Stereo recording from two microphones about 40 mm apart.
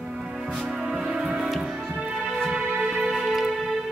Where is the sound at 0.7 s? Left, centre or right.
Centre.